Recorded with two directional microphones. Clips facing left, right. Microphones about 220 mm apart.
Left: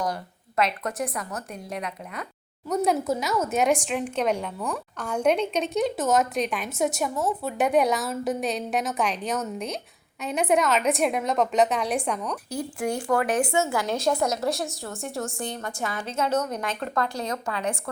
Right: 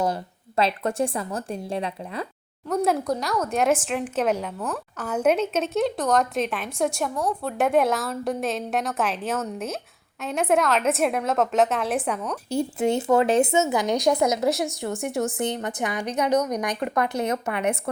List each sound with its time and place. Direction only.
0.0 s a woman's voice: 25° right (ahead or behind)
2.6 s speech: centre (ahead or behind)
12.5 s a woman's voice: 25° right (ahead or behind)